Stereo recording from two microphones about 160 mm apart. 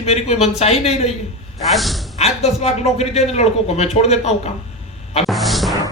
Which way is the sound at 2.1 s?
40° left (ahead or behind).